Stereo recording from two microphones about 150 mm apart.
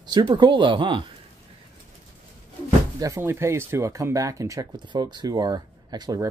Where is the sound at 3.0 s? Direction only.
20° right (ahead or behind).